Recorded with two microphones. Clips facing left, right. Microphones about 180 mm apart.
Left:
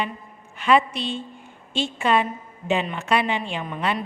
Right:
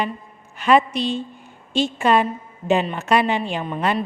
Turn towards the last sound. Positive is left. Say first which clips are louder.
# right 4 dB
turn(degrees=-40)  # may be behind; listen again after turning